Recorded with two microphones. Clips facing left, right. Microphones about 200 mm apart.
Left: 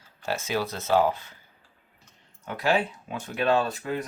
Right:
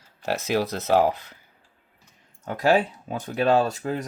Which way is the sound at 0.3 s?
70° right (ahead or behind).